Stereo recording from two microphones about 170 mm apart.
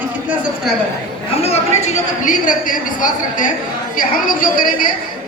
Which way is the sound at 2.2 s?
50° left (ahead or behind).